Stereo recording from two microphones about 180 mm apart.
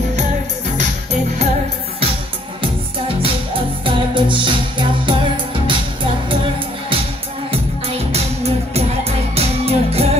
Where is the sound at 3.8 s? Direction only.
30° right (ahead or behind).